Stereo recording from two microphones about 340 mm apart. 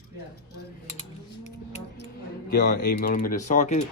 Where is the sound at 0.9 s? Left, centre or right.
Centre.